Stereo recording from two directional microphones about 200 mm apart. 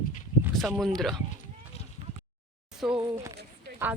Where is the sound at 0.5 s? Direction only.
Centre (ahead or behind).